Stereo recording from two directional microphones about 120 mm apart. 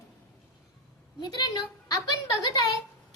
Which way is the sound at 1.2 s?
35° left (ahead or behind).